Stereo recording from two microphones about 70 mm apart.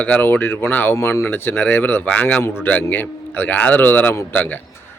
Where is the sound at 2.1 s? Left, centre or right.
Centre.